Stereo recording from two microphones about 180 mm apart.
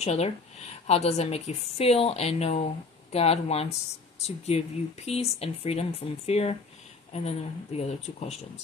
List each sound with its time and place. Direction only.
0.0 s speech: 35° left (ahead or behind)